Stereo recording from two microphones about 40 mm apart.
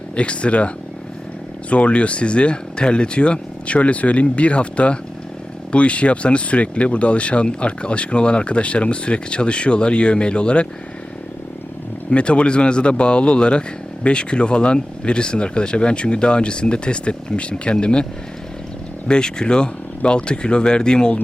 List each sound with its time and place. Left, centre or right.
0.2 s speech: left
1.7 s speech: left
12.1 s speech: left
19.0 s speech: left